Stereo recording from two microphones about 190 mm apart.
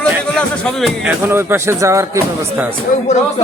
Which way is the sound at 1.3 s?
10° right (ahead or behind).